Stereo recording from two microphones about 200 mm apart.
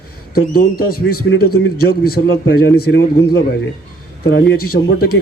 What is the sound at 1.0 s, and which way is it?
A man's voice, 65° left (ahead or behind).